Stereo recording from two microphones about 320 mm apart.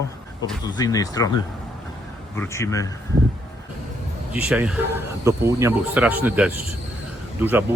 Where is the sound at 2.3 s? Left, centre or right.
Centre.